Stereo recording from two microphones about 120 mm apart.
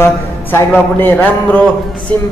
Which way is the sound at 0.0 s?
20° left (ahead or behind).